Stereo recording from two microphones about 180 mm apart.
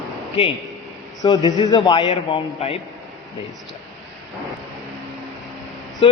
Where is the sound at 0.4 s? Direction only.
30° left (ahead or behind).